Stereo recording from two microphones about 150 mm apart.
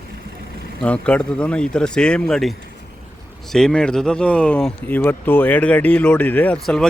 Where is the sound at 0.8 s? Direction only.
10° left (ahead or behind).